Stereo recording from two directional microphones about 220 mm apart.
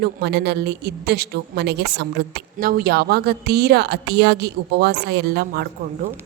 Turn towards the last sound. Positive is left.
turn(degrees=-45)  # may be behind; listen again after turning